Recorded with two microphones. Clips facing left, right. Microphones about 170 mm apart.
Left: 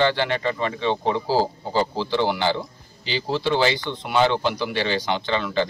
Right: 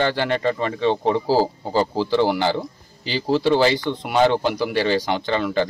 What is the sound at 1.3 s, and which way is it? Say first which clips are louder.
A man's voice: right 3 dB; 40° right (ahead or behind).